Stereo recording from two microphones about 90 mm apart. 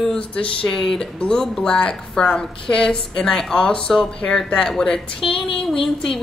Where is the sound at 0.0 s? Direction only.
5° left (ahead or behind).